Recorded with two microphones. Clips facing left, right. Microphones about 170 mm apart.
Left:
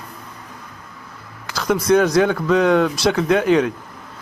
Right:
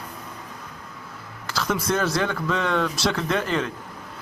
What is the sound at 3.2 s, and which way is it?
Speech, 5° left (ahead or behind).